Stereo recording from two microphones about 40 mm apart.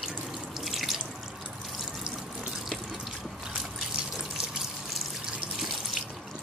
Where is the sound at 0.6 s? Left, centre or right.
Centre.